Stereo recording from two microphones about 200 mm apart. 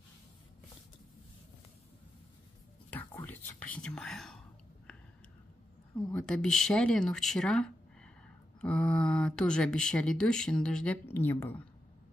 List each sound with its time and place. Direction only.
2.9 s whispering: 10° left (ahead or behind)
6.1 s speech: 5° left (ahead or behind)